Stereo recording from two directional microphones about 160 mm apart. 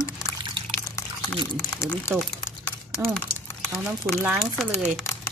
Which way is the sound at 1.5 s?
10° left (ahead or behind).